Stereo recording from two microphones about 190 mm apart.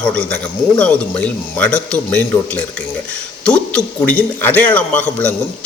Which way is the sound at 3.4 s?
5° left (ahead or behind).